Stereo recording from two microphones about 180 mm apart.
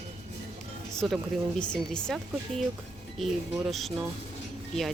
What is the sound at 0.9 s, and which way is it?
Speech, centre (ahead or behind).